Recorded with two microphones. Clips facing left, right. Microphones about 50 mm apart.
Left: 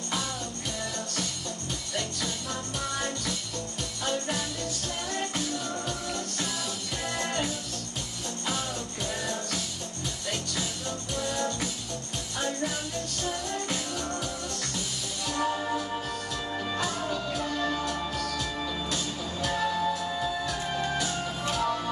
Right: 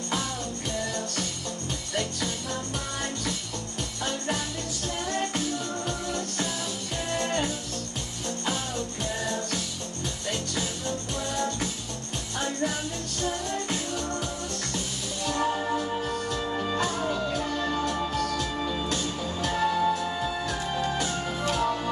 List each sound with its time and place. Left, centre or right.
2.0 s music: right
4.0 s music: right
5.9 s music: right
15.4 s music: centre
17.1 s music: right
18.6 s music: centre
18.9 s music: right
19.7 s music: right